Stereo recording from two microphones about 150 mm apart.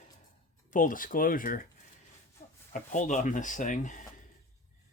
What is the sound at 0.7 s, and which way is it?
Speech, 65° left (ahead or behind).